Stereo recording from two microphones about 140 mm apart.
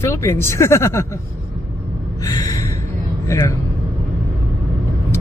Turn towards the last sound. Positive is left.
turn(degrees=20)  # may be behind; listen again after turning